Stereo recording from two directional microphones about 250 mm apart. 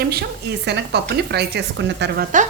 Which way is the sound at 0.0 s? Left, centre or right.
Right.